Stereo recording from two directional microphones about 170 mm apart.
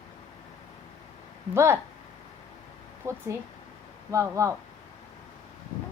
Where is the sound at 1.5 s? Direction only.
15° right (ahead or behind).